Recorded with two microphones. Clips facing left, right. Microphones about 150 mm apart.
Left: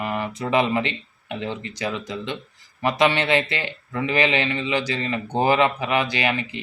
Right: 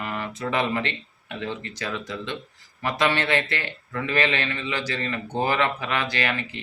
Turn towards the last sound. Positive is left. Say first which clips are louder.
# left 3 dB
turn(degrees=15)  # may be behind; listen again after turning